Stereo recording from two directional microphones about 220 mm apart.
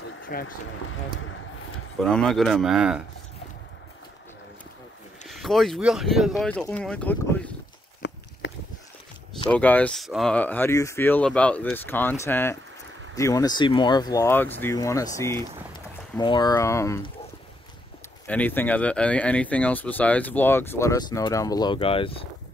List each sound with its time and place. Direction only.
0.0 s a sound: 60° left (ahead or behind)
2.0 s speech: centre (ahead or behind)
5.3 s speech: centre (ahead or behind)
8.0 s a sound: 50° left (ahead or behind)
9.5 s speech: 5° left (ahead or behind)
18.2 s speech: 5° left (ahead or behind); by 22.1 s 25° left (ahead or behind)